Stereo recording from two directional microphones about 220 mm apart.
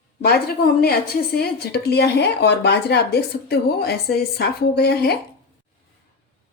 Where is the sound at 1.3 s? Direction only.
45° left (ahead or behind).